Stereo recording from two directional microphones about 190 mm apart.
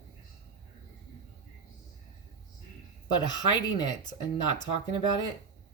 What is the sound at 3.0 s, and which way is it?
Speech, 20° left (ahead or behind).